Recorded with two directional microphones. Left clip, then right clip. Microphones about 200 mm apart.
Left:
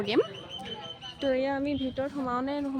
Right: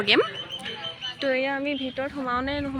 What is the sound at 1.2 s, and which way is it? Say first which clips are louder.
Speech: right 2 dB; 20° left (ahead or behind).